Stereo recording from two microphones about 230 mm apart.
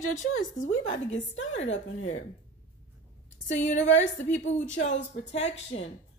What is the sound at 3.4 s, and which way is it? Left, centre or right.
A woman's voice, left.